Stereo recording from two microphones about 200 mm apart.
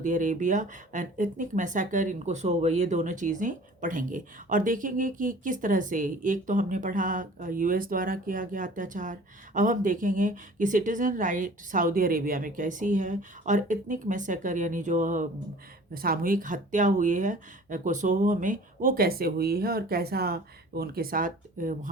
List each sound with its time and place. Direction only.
0.0 s speech: 40° right (ahead or behind)